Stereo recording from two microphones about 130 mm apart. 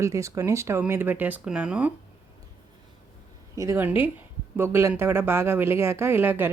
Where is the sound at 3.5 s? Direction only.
25° right (ahead or behind).